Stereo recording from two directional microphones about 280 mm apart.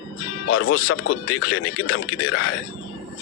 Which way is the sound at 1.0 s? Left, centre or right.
Left.